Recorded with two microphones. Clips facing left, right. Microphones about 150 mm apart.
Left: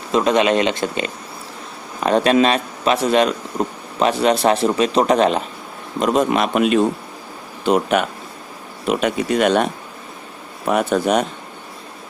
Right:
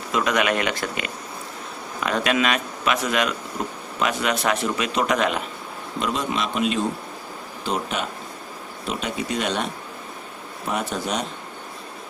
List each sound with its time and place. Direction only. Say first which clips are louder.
0.1 s speech: left 6 dB; 30° left (ahead or behind)
6.0 s a man's voice: left 9 dB; 50° left (ahead or behind)
10.7 s a man's voice: left 9 dB; 60° left (ahead or behind)